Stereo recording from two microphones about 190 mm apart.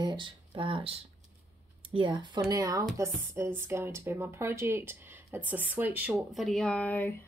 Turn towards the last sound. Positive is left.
turn(degrees=10)  # may be behind; listen again after turning